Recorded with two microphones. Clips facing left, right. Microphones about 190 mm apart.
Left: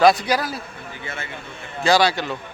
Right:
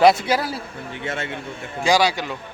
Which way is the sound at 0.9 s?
80° right.